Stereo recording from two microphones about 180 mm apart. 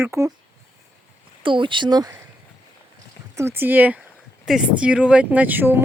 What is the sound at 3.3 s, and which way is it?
Speech, 15° right (ahead or behind).